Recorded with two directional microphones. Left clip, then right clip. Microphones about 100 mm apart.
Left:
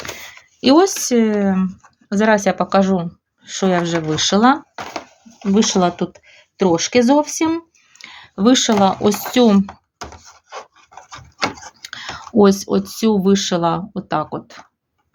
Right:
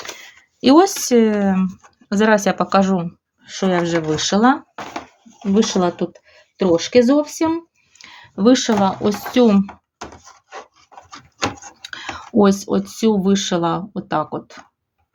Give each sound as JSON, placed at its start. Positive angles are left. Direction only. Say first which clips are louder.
{"t": 0.6, "sound": "speech", "louder": "even", "side_deg": 5}
{"t": 3.4, "sound": "speech", "louder": "left 1 dB", "side_deg": 25}
{"t": 4.7, "sound": "speech", "louder": "left 1 dB", "side_deg": 45}
{"t": 8.0, "sound": "speech", "louder": "right 1 dB", "side_deg": 25}
{"t": 9.4, "sound": "speech", "louder": "even", "side_deg": 25}
{"t": 11.8, "sound": "speech", "louder": "right 1 dB", "side_deg": 15}